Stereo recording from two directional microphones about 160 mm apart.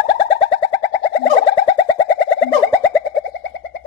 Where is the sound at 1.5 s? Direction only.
30° left (ahead or behind).